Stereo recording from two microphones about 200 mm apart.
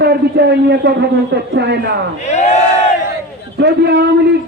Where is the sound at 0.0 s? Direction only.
55° right (ahead or behind).